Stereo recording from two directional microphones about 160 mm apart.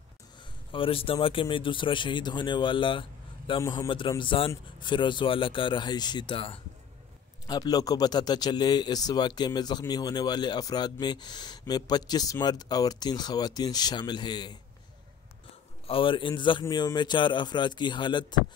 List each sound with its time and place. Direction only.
0.7 s speech: 35° left (ahead or behind)
3.6 s speech: 20° left (ahead or behind)
4.2 s speech: 30° left (ahead or behind)
15.9 s speech: 30° left (ahead or behind)